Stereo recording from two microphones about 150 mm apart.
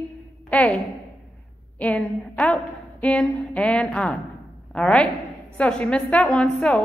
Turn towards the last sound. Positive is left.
turn(degrees=5)  # may be behind; listen again after turning